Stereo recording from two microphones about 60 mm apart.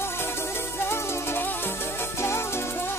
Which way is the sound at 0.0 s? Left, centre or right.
Left.